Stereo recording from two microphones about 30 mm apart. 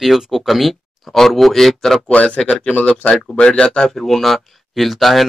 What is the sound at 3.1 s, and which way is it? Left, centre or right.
Speech, left.